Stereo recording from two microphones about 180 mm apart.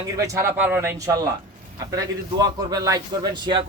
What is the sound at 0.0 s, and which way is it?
A man's voice, 20° right (ahead or behind).